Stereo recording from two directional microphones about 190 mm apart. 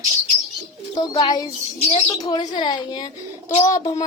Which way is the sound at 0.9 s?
20° left (ahead or behind).